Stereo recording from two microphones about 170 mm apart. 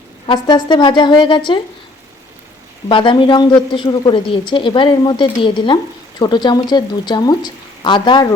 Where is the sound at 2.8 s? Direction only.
30° left (ahead or behind).